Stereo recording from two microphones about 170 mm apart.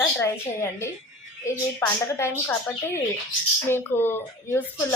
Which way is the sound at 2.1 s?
15° left (ahead or behind).